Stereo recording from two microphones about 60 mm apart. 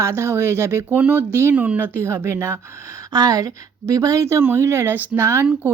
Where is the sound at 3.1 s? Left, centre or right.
Right.